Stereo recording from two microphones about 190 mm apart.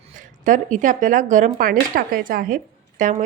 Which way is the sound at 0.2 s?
45° right (ahead or behind).